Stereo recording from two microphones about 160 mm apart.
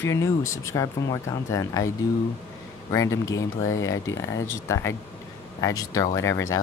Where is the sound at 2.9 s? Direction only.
20° left (ahead or behind).